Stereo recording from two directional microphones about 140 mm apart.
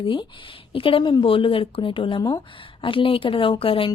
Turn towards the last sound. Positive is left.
turn(degrees=40)  # may be behind; listen again after turning